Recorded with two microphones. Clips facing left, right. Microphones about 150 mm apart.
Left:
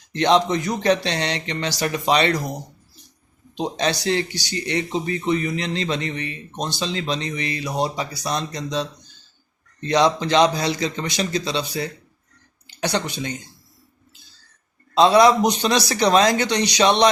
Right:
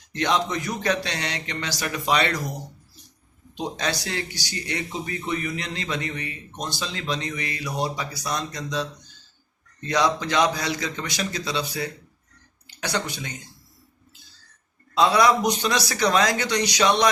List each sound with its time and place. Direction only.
0.1 s speech: 30° left (ahead or behind)
3.5 s speech: 25° left (ahead or behind)
14.9 s speech: 25° left (ahead or behind)